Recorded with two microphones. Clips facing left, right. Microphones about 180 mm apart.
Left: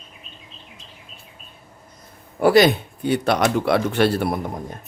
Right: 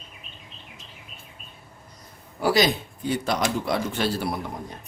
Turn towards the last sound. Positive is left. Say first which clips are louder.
# left 5 dB
turn(degrees=55)  # may be behind; listen again after turning